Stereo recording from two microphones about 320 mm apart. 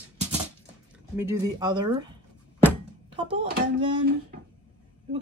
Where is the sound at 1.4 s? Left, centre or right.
Centre.